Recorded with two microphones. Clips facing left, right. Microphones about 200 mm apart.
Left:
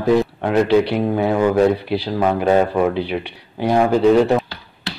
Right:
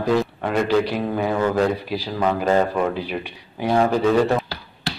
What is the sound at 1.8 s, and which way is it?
Speech, 65° left (ahead or behind).